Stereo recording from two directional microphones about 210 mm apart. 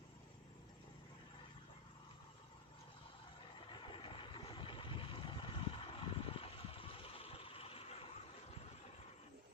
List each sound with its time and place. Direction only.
3.7 s vehicle: 25° left (ahead or behind)